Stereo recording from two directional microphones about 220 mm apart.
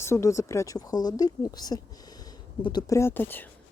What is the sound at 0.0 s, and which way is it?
Speech, 10° left (ahead or behind).